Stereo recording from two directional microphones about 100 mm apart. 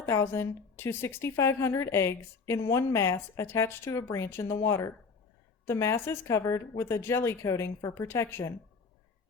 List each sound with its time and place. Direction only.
0.0 s a woman's voice: 25° left (ahead or behind)